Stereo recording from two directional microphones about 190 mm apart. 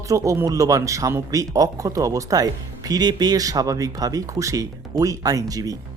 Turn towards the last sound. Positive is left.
turn(degrees=-20)  # may be behind; listen again after turning